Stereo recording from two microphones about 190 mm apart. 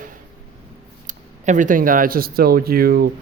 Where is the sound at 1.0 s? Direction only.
40° right (ahead or behind).